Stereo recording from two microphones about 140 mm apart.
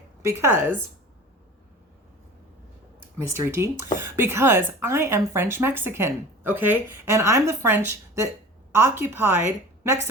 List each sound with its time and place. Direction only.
0.2 s speech: 20° right (ahead or behind)
3.4 s speech: 20° right (ahead or behind)